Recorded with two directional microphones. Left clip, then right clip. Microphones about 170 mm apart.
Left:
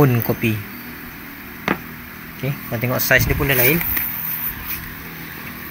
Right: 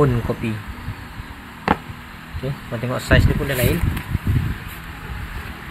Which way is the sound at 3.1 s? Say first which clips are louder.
Left 3 dB; 15° left (ahead or behind).